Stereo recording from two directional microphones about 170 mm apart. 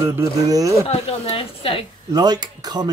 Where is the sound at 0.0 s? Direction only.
15° right (ahead or behind).